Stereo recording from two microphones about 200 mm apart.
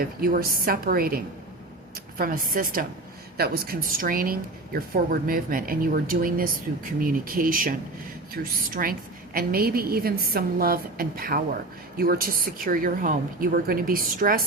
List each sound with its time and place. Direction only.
0.0 s speech: 50° right (ahead or behind)